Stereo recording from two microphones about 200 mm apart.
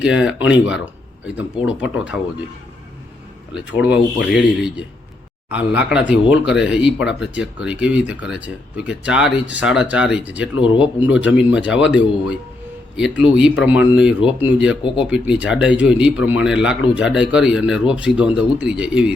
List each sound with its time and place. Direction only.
0.0 s speech: 5° right (ahead or behind)
3.5 s speech: 5° right (ahead or behind)